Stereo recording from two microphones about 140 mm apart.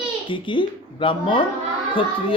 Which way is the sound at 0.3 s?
35° left (ahead or behind).